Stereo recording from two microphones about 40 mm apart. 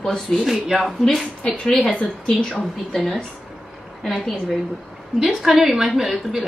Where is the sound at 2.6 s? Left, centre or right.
Centre.